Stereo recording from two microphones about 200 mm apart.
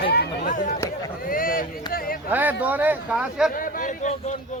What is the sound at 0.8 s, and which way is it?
Speech, 15° left (ahead or behind).